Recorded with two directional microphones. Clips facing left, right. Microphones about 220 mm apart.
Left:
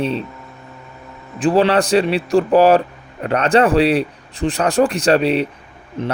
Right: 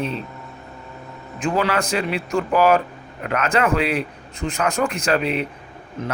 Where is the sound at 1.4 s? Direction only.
30° left (ahead or behind).